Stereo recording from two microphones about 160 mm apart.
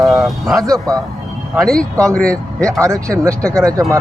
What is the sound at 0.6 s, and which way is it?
Speech, 20° right (ahead or behind).